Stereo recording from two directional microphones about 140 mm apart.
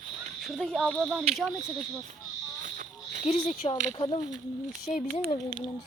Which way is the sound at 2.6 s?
70° right (ahead or behind).